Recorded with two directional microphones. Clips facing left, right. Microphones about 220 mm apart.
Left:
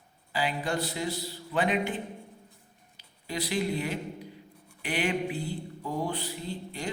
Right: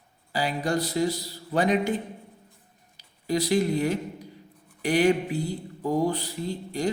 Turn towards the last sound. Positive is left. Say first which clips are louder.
# right 7 dB
turn(degrees=-40)  # may be behind; listen again after turning